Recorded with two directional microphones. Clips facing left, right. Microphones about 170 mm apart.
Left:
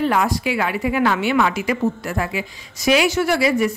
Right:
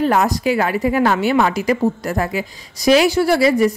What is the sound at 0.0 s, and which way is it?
A woman's voice, 40° right (ahead or behind).